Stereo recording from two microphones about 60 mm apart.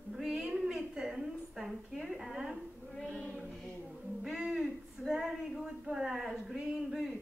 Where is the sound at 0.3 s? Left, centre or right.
Centre.